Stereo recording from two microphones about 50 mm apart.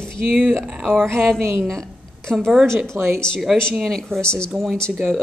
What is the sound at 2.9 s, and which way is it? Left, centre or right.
Speech, right.